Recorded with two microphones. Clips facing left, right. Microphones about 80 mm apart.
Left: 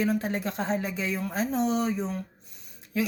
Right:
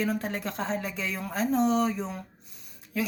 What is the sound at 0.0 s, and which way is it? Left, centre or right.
Speech, centre.